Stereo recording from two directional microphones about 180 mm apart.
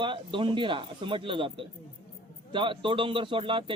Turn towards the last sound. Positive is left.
turn(degrees=-30)  # may be behind; listen again after turning